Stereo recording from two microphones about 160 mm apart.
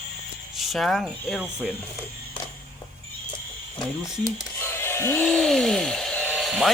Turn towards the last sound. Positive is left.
turn(degrees=0)  # may be behind; listen again after turning